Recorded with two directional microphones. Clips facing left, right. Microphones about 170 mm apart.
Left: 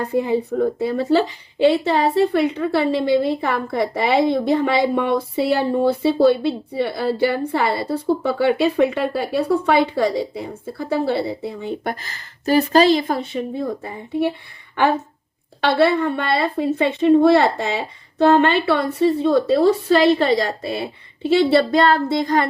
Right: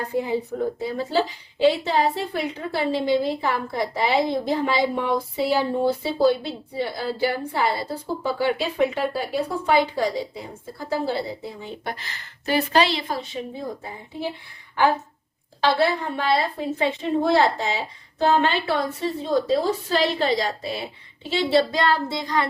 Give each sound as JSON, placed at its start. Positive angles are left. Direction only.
{"t": 0.1, "sound": "a woman's voice", "side_deg": 65}
{"t": 15.6, "sound": "a woman's voice", "side_deg": 65}